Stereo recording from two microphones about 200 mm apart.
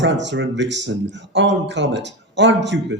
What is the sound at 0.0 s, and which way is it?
Speech, 65° right (ahead or behind).